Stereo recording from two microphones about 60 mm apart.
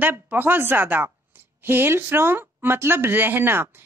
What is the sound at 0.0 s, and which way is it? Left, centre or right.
A woman's voice, right.